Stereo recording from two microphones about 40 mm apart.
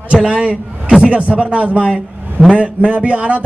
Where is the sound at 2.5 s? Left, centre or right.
Right.